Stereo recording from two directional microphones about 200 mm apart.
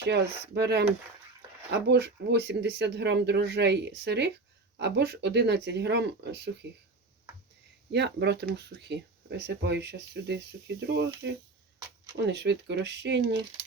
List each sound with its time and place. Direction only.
0.0 s speech: 55° right (ahead or behind)
7.9 s speech: 60° right (ahead or behind)